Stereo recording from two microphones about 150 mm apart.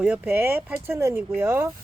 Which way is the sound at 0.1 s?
10° right (ahead or behind).